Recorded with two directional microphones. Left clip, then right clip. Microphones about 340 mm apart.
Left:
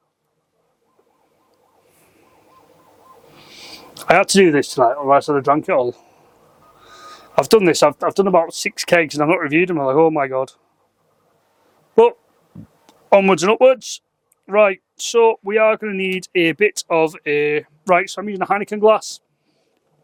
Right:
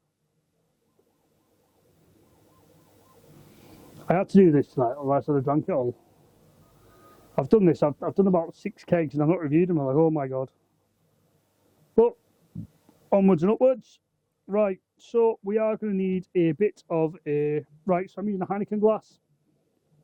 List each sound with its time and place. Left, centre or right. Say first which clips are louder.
3.3 s owl: left 17 dB; centre
3.8 s a sound: left 13 dB; centre
4.1 s speech: left 8 dB; centre
5.8 s speech: left 8 dB; centre
13.1 s speech: left 9 dB; centre